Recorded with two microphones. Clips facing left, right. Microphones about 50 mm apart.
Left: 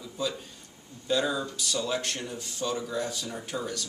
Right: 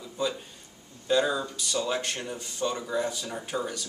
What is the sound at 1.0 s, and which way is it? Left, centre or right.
Speech, centre.